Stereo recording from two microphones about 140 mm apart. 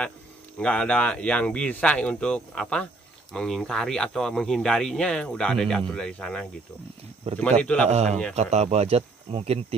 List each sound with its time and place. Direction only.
0.6 s speech: 5° left (ahead or behind)
7.3 s speech: 50° right (ahead or behind)
7.6 s speech: 10° left (ahead or behind)
7.9 s speech: 50° right (ahead or behind)